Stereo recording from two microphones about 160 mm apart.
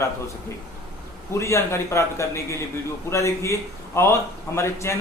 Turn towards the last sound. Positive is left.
turn(degrees=15)  # may be behind; listen again after turning